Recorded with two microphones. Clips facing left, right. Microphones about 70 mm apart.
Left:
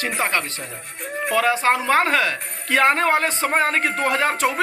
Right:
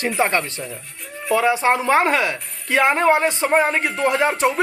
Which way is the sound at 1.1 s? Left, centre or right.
Left.